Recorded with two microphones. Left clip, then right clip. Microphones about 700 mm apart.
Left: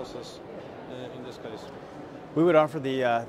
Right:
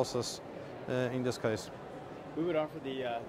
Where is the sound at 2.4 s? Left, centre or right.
Left.